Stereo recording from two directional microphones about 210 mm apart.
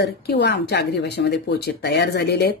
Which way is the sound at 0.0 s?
50° left (ahead or behind).